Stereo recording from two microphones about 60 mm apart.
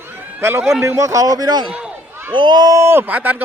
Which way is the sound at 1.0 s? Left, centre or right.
Right.